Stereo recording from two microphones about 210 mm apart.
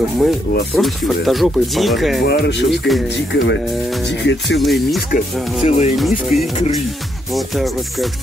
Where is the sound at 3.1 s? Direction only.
55° left (ahead or behind).